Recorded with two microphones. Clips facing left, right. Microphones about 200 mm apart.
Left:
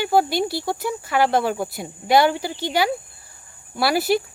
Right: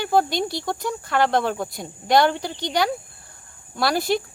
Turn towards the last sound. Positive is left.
turn(degrees=5)  # may be behind; listen again after turning